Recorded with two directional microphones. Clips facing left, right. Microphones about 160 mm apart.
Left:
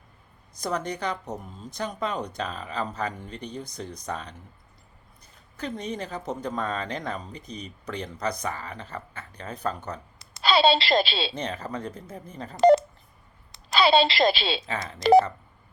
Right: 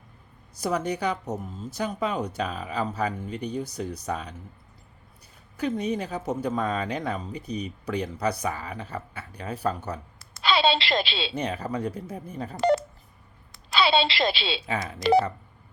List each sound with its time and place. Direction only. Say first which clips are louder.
0.5 s speech: right 3 dB; 10° right (ahead or behind)
5.5 s speech: right 5 dB; 10° right (ahead or behind)
10.4 s a woman's voice: left 2 dB; 35° left (ahead or behind)
11.3 s speech: right 3 dB; 10° right (ahead or behind)
13.7 s a woman's voice: left 3 dB; 40° left (ahead or behind)
14.7 s speech: right 2 dB; 5° right (ahead or behind)